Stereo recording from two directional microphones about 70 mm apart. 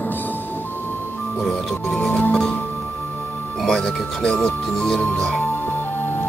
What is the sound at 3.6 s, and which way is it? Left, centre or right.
Speech, centre.